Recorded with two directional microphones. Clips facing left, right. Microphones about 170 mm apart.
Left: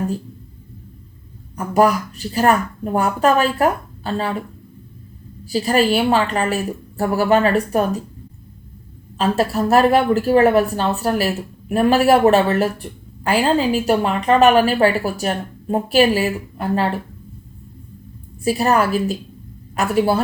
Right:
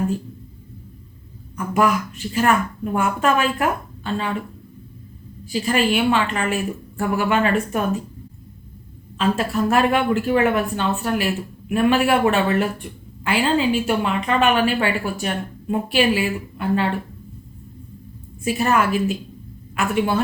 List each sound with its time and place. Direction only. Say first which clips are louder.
1.5 s a woman's voice: left 4 dB; 40° left (ahead or behind)
5.5 s a woman's voice: left 3 dB; 40° left (ahead or behind)
9.1 s a woman's voice: left 2 dB; 40° left (ahead or behind)
18.4 s a woman's voice: left 3 dB; 35° left (ahead or behind)